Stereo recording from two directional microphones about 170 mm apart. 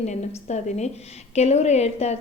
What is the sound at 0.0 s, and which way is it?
A woman's voice, 40° left (ahead or behind).